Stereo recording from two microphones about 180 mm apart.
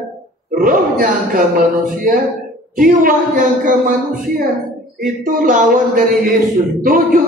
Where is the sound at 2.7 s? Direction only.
50° right (ahead or behind).